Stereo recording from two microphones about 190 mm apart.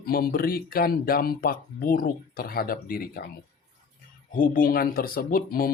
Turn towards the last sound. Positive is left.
turn(degrees=50)  # may be behind; listen again after turning